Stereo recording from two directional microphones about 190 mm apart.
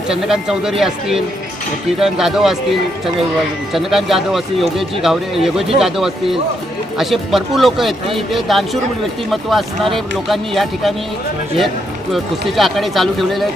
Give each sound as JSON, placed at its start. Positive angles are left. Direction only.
{"t": 0.1, "sound": "speech", "side_deg": -5}
{"t": 3.7, "sound": "speech", "side_deg": 0}
{"t": 12.1, "sound": "speech", "side_deg": 0}